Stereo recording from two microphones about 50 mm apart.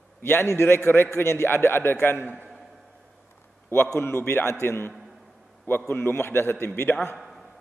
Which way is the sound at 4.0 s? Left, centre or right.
Left.